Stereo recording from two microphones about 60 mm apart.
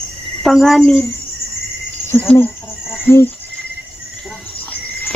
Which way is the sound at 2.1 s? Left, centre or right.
Left.